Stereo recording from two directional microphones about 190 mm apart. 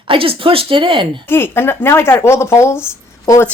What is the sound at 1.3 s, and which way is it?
Speech, 10° left (ahead or behind).